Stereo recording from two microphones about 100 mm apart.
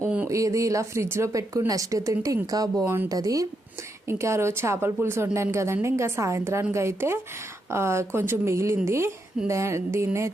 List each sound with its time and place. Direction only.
0.3 s speech: 30° right (ahead or behind)
2.8 s a woman's voice: 20° right (ahead or behind)
3.1 s speech: 35° right (ahead or behind)
4.0 s a woman's voice: 25° right (ahead or behind)